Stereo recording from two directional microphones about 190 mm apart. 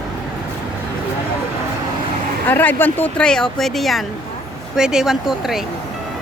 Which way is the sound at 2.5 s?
10° left (ahead or behind).